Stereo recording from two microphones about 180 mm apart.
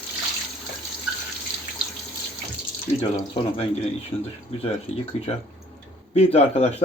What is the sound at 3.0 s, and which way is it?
Speech, 35° left (ahead or behind).